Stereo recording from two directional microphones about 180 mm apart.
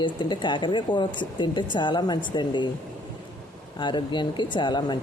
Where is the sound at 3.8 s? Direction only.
25° left (ahead or behind).